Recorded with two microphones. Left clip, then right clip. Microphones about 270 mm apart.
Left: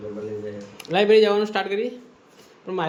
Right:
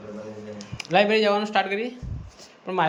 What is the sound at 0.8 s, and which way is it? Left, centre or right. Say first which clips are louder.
A man's voice: left 3 dB; centre.